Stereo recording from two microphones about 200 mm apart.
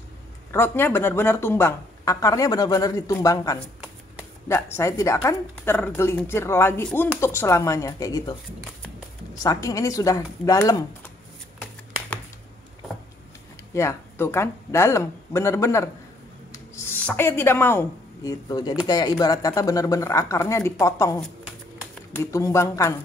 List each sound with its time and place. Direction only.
0.5 s a woman's voice: 10° left (ahead or behind)
9.4 s a woman's voice: 15° left (ahead or behind)
13.7 s a woman's voice: 15° left (ahead or behind)